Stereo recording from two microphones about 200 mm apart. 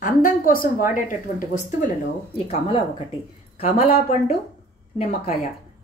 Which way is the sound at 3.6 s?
30° left (ahead or behind).